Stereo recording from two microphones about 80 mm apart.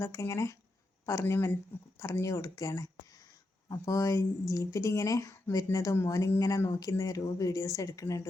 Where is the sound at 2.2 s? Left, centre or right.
Left.